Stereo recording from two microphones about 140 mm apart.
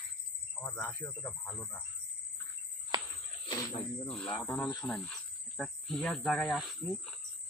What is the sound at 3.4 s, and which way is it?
Speech, 30° left (ahead or behind).